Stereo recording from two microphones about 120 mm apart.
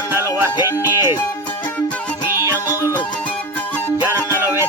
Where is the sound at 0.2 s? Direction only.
20° right (ahead or behind).